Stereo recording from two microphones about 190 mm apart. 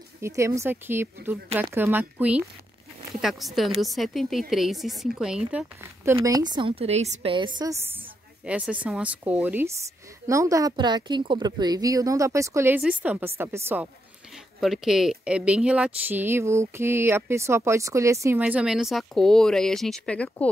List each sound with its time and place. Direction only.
0.2 s speech: 15° right (ahead or behind)
6.2 s a woman's voice: 20° right (ahead or behind)
8.5 s speech: 5° right (ahead or behind)
14.3 s speech: centre (ahead or behind)